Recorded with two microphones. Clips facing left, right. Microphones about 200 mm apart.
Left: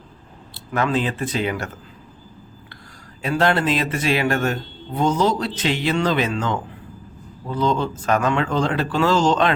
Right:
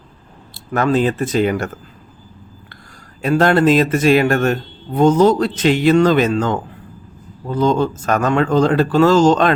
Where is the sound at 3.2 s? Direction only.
45° right (ahead or behind).